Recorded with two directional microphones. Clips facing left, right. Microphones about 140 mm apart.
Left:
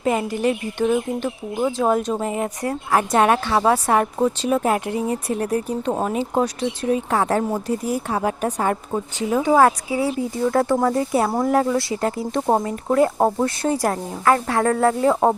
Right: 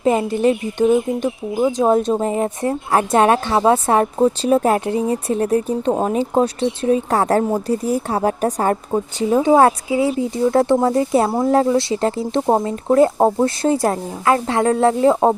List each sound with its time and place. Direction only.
0.0 s a woman's voice: 25° right (ahead or behind)
0.9 s speech: 10° right (ahead or behind)
1.8 s a woman's voice: 30° right (ahead or behind)
8.9 s a woman's voice: 25° right (ahead or behind)